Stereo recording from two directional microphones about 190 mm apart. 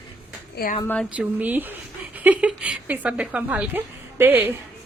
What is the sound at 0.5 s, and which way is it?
Speech, 50° left (ahead or behind).